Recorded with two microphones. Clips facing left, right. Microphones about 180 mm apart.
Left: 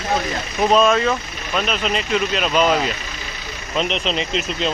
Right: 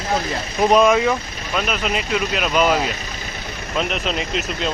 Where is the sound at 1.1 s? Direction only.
5° right (ahead or behind).